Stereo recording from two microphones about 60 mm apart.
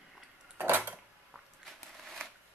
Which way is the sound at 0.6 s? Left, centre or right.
Right.